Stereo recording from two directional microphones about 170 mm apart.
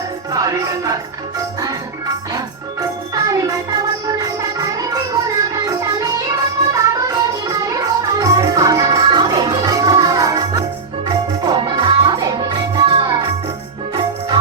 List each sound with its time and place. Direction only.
0.3 s music: 20° right (ahead or behind)
3.2 s music: 20° right (ahead or behind)